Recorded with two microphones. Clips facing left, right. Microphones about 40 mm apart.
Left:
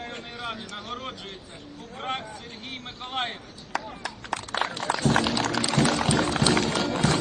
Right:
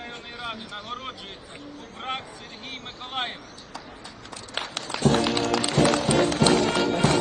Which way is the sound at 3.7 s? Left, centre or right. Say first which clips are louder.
Left 10 dB; left.